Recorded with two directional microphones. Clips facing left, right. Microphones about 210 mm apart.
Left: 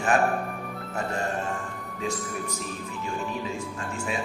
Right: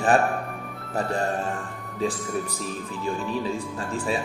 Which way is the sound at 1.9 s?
35° right (ahead or behind).